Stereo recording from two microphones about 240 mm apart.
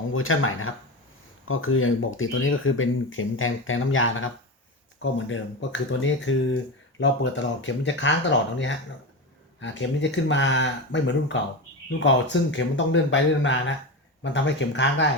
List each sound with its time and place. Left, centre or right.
0.1 s speech: left